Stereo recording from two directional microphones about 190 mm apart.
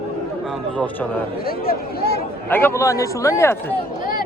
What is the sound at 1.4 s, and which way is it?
Speech, 50° left (ahead or behind).